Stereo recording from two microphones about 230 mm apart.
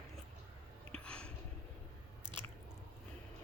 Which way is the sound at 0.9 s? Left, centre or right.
Centre.